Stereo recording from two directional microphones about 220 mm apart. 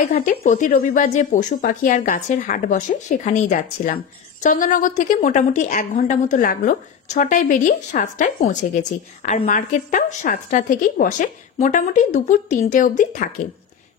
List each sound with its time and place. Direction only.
0.0 s speech: 40° left (ahead or behind)